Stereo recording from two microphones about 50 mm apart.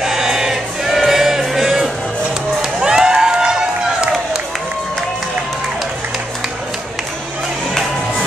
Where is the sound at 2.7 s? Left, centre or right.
Centre.